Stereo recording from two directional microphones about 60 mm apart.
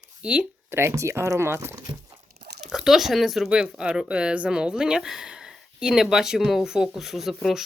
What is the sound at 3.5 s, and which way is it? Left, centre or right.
Speech, centre.